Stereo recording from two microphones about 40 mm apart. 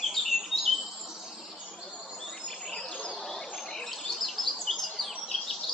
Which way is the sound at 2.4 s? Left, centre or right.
Centre.